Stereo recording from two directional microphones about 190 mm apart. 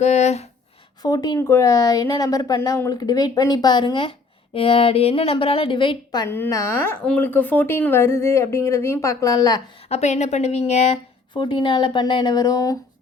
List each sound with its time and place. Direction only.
0.0 s a woman's voice: 35° left (ahead or behind)
1.0 s a woman's voice: 20° left (ahead or behind)
9.9 s a woman's voice: 35° left (ahead or behind)
11.3 s a woman's voice: 25° left (ahead or behind)